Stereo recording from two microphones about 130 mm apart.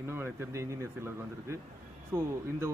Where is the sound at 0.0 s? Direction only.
20° right (ahead or behind).